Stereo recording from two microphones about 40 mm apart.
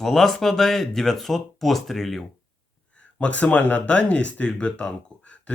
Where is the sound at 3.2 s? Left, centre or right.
Left.